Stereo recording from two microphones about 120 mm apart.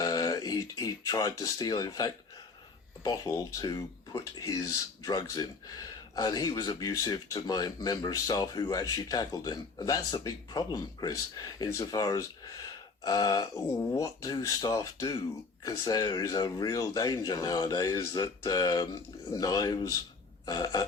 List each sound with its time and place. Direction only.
0.0 s speech: 35° left (ahead or behind)
20.4 s burping: 35° left (ahead or behind)